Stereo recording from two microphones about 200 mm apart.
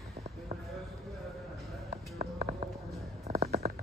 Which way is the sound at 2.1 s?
30° right (ahead or behind).